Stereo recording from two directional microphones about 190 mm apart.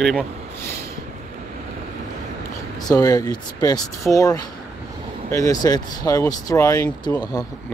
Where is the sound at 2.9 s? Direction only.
20° left (ahead or behind).